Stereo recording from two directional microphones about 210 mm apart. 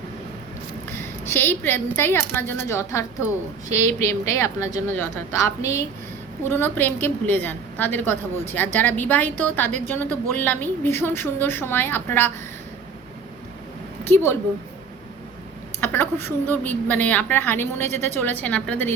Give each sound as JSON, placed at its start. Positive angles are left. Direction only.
{"t": 0.9, "sound": "a woman's voice", "side_deg": 10}
{"t": 3.7, "sound": "a woman's voice", "side_deg": -35}
{"t": 4.3, "sound": "a woman's voice", "side_deg": 15}
{"t": 15.8, "sound": "a woman's voice", "side_deg": 10}